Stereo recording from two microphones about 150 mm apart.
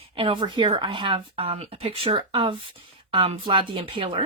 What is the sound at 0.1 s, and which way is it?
A woman's voice, 35° right (ahead or behind).